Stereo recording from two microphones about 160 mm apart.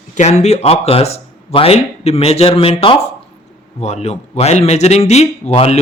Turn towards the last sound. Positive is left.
turn(degrees=40)  # may be behind; listen again after turning